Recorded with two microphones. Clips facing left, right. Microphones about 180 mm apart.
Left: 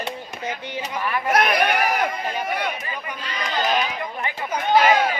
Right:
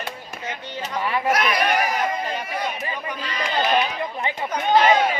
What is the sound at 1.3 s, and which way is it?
Speech, 55° left (ahead or behind).